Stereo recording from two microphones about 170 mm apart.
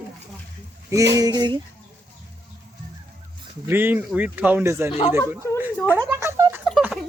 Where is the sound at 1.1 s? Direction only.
20° right (ahead or behind).